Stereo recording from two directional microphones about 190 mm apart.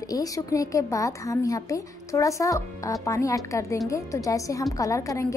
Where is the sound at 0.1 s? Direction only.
20° left (ahead or behind).